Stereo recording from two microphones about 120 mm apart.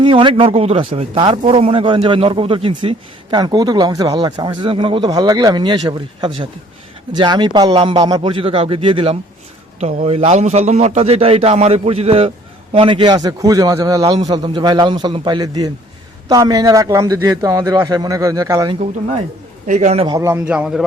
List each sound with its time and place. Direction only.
0.0 s a man's voice: 45° right (ahead or behind)
9.8 s a man's voice: 60° right (ahead or behind)
12.7 s a man's voice: 45° right (ahead or behind); by 18.7 s 30° right (ahead or behind)
19.6 s a man's voice: 90° right
20.1 s a man's voice: 25° right (ahead or behind)
20.4 s a man's voice: 10° right (ahead or behind)